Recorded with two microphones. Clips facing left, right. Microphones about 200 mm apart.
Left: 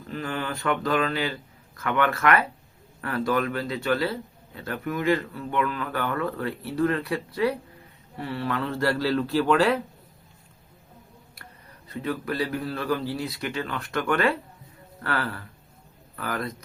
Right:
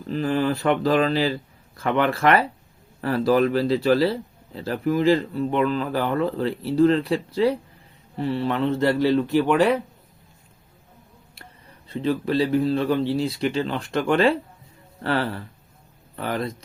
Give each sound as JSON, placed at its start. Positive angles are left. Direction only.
{"t": 0.1, "sound": "speech", "side_deg": -35}
{"t": 11.9, "sound": "speech", "side_deg": -25}